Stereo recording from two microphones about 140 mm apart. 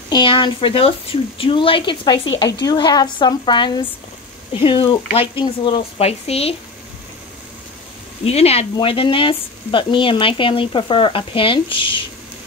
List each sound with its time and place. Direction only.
0.1 s speech: 35° left (ahead or behind)
8.2 s speech: 45° left (ahead or behind)